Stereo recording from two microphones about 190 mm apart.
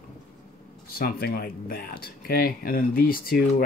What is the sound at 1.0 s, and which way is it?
Speech, 55° left (ahead or behind).